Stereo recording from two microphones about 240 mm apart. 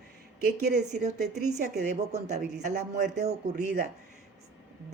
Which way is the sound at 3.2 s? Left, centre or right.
Right.